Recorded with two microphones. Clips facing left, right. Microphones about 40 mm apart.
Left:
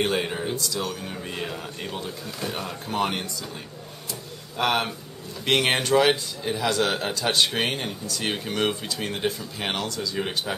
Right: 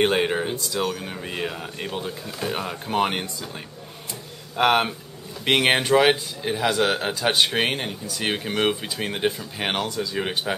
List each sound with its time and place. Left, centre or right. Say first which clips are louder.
0.0 s a man's voice: right 4 dB; right
4.1 s a sound: right 1 dB; right
5.4 s a man's voice: right 3 dB; centre